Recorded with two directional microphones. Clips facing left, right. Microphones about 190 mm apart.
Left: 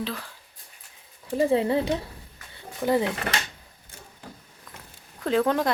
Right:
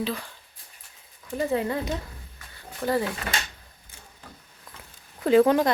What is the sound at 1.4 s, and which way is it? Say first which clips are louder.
Speech: left 4 dB; 30° left (ahead or behind).